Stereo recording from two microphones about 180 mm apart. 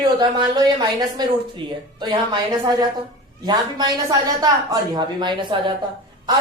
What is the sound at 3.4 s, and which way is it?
Speech, 25° right (ahead or behind).